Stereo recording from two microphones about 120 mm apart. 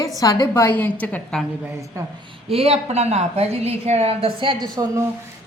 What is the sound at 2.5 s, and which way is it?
A woman's voice, 60° right (ahead or behind).